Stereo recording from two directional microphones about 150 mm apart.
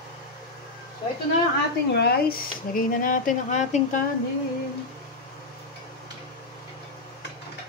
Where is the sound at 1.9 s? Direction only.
90° left; by 4.0 s 55° left (ahead or behind).